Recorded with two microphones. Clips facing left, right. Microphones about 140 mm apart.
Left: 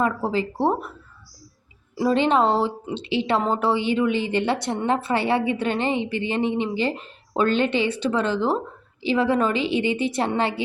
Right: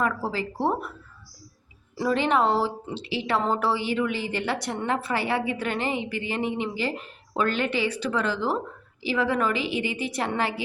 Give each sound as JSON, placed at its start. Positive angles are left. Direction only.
{"t": 0.0, "sound": "a woman's voice", "side_deg": 25}
{"t": 2.0, "sound": "a woman's voice", "side_deg": 25}